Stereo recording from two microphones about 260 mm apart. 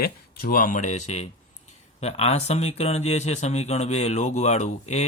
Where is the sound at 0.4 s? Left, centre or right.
Left.